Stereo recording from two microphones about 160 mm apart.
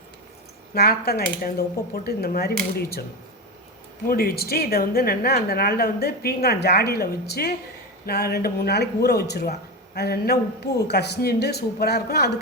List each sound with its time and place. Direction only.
0.7 s a woman's voice: 80° left
4.0 s a woman's voice: 65° left (ahead or behind)
8.0 s a woman's voice: 85° left